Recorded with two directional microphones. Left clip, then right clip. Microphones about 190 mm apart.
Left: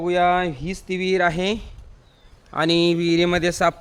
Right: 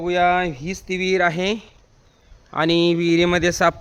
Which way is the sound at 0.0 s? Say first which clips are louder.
Right 1 dB; centre (ahead or behind).